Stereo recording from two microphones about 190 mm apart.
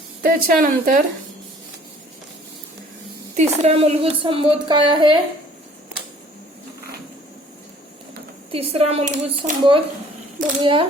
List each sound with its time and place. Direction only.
0.2 s speech: 50° right (ahead or behind)
3.3 s a woman's voice: 35° right (ahead or behind)
8.5 s a woman's voice: 30° right (ahead or behind)